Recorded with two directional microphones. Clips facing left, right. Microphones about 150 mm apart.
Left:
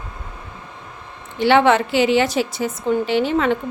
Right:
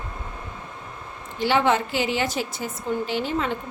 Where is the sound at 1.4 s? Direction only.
70° left (ahead or behind).